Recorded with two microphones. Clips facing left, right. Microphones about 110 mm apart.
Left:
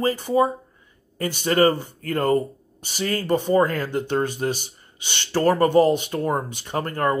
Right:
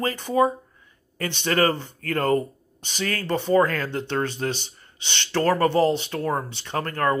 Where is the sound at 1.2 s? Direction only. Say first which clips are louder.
Left 3 dB; 10° left (ahead or behind).